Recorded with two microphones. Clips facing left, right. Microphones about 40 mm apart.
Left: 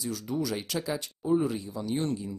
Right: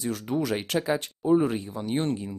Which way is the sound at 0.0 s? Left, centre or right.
Right.